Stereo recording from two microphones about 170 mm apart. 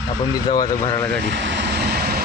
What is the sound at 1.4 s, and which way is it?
Vehicle, 90° right.